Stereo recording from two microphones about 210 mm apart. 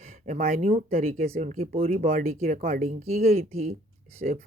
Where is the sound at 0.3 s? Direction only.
40° right (ahead or behind).